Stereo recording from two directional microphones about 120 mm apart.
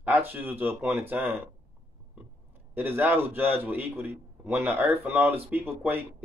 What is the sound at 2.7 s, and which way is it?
Speech, 15° right (ahead or behind).